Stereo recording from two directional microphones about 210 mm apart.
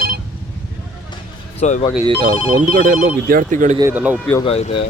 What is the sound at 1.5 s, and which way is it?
Speech, 35° left (ahead or behind).